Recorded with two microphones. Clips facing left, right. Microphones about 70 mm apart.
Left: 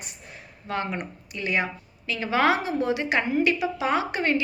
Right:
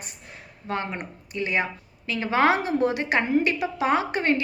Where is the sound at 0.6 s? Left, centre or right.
Right.